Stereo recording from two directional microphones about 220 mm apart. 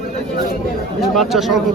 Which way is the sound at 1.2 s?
Centre (ahead or behind).